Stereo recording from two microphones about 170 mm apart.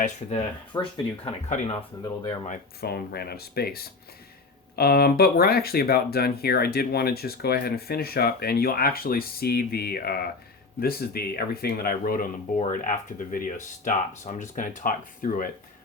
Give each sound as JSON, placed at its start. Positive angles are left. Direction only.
{"t": 0.0, "sound": "speech", "side_deg": 40}
{"t": 0.7, "sound": "speech", "side_deg": 25}
{"t": 2.8, "sound": "speech", "side_deg": 65}